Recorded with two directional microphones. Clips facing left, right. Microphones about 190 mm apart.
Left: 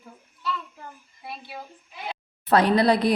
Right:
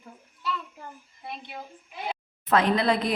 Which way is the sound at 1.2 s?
5° left (ahead or behind).